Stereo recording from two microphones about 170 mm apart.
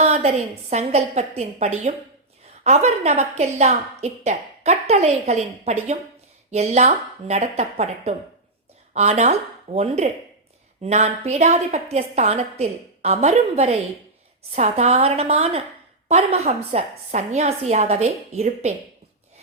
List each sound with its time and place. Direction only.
0.0 s a woman's voice: 40° right (ahead or behind)